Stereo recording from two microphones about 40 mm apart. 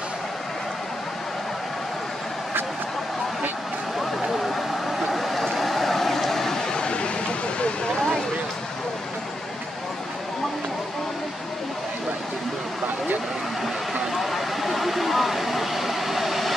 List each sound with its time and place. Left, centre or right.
4.2 s vehicle: centre
6.8 s a sound: left
14.1 s vehicle: centre